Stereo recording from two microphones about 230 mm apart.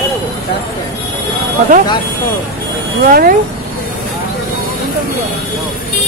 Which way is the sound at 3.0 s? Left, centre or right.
Right.